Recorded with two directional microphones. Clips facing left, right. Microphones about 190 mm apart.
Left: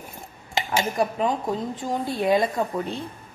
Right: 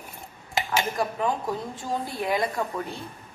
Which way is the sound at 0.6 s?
25° left (ahead or behind).